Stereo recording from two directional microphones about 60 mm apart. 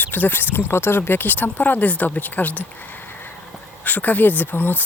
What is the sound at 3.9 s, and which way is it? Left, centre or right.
Speech, left.